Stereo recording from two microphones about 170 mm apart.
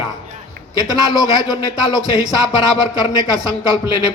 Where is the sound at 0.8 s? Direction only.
25° right (ahead or behind).